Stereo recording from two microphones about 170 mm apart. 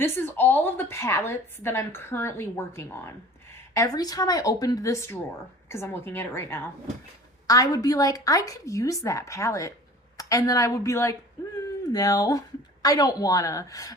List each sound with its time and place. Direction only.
0.0 s a woman's voice: 10° left (ahead or behind)